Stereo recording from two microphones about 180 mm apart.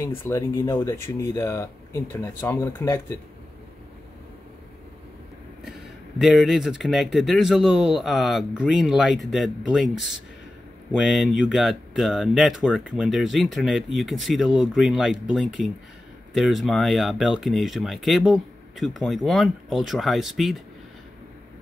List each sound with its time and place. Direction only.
0.0 s speech: 15° left (ahead or behind)
5.6 s speech: centre (ahead or behind)